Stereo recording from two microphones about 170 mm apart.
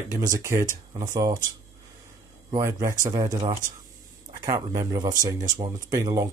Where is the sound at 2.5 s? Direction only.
20° right (ahead or behind).